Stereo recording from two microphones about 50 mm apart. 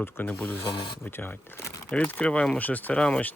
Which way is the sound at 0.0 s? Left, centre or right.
Left.